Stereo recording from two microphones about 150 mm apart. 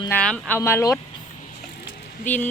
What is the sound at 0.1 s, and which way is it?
Speech, 10° left (ahead or behind).